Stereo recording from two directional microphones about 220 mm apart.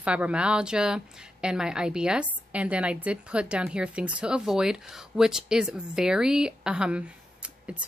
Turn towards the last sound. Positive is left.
turn(degrees=-5)  # may be behind; listen again after turning